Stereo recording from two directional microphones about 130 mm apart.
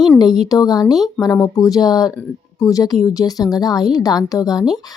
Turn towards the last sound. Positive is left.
turn(degrees=30)  # may be behind; listen again after turning